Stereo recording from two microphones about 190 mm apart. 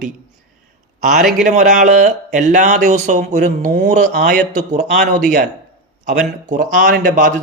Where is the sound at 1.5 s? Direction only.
40° right (ahead or behind).